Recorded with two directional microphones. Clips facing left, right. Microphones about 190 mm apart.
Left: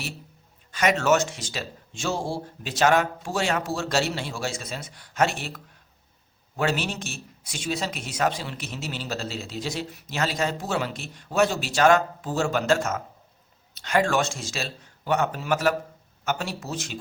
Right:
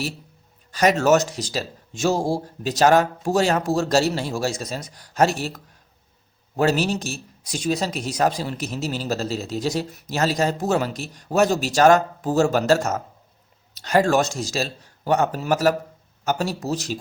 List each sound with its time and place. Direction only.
0.7 s a man's voice: 35° right (ahead or behind)